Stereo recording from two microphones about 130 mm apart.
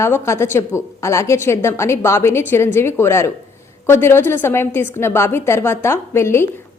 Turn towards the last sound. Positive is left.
turn(degrees=20)  # may be behind; listen again after turning